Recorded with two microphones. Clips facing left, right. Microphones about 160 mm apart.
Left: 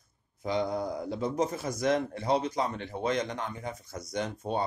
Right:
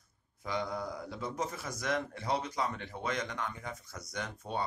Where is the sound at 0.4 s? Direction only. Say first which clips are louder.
Left 6 dB; 25° left (ahead or behind).